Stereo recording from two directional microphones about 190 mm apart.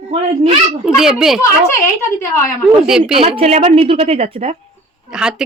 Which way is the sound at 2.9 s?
5° right (ahead or behind).